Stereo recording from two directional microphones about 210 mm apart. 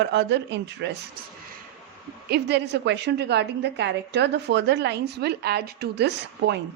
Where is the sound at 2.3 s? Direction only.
55° right (ahead or behind).